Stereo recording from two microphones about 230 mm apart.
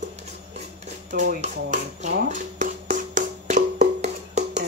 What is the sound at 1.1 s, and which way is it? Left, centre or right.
Music, right.